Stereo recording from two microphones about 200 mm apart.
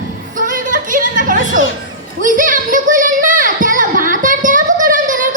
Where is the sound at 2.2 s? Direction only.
40° right (ahead or behind).